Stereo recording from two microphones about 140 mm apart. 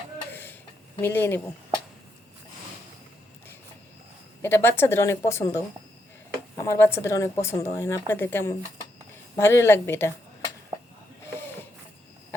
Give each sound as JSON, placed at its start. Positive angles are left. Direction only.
{"t": 1.0, "sound": "speech", "side_deg": 15}
{"t": 4.4, "sound": "speech", "side_deg": 15}